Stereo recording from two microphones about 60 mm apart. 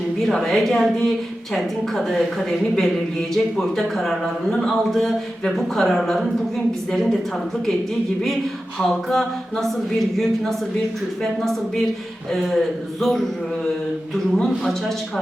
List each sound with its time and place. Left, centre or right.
0.3 s a woman's voice: centre
8.8 s a woman's voice: centre
12.3 s a woman's voice: centre
14.3 s a woman's voice: centre